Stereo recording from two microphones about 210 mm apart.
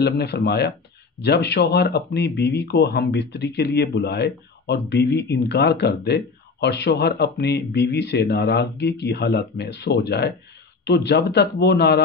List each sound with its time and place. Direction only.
0.0 s speech: 50° left (ahead or behind)